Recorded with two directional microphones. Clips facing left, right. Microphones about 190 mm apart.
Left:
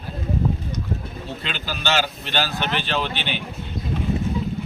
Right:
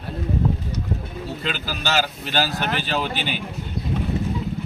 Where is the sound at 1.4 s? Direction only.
5° right (ahead or behind).